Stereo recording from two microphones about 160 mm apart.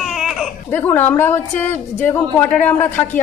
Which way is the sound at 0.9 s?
10° left (ahead or behind).